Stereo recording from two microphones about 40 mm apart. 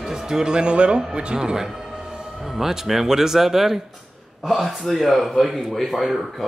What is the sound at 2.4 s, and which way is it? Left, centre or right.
Speech, centre.